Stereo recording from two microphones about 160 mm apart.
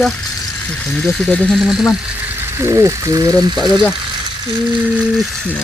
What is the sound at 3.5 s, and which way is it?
Speech, centre (ahead or behind).